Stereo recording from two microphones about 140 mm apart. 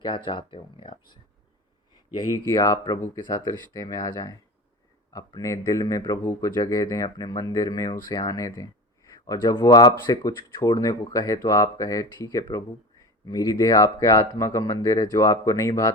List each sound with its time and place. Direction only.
0.3 s speech: 40° left (ahead or behind)
2.1 s speech: 25° left (ahead or behind)